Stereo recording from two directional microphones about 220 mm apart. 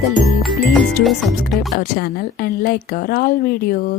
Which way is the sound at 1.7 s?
45° left (ahead or behind).